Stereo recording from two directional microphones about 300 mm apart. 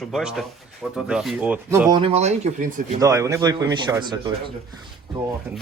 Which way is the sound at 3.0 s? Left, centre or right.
Centre.